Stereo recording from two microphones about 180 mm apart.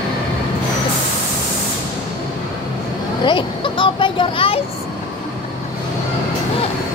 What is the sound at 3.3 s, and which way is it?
Speech, 25° left (ahead or behind).